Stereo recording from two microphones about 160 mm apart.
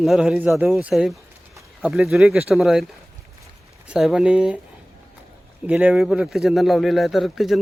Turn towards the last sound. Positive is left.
turn(degrees=0)  # may be behind; listen again after turning